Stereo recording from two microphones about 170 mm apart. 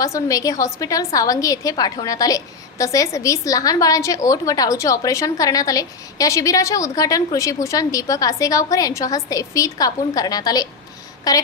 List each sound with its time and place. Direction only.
0.0 s a woman's voice: 20° left (ahead or behind)